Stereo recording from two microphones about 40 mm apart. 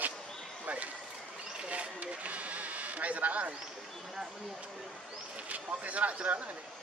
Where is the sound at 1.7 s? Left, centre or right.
Right.